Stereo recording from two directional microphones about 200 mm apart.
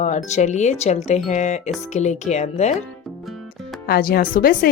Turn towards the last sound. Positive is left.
turn(degrees=45)  # may be behind; listen again after turning